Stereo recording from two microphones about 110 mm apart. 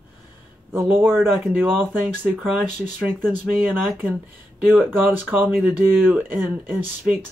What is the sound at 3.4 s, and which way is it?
Speech, 15° right (ahead or behind).